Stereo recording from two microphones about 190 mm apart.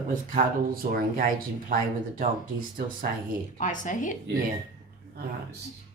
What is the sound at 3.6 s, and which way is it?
Speech, 40° left (ahead or behind).